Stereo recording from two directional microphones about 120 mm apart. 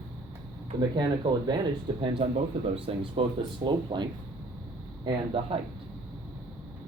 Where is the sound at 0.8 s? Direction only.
35° right (ahead or behind).